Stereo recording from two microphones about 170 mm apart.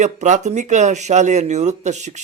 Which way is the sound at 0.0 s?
45° right (ahead or behind).